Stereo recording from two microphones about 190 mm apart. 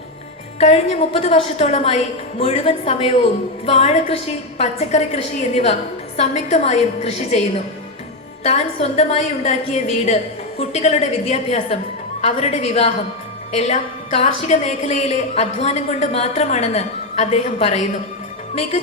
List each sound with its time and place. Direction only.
0.6 s a woman's voice: 35° left (ahead or behind)